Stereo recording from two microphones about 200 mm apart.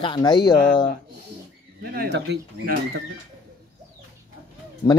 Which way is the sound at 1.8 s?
50° right (ahead or behind).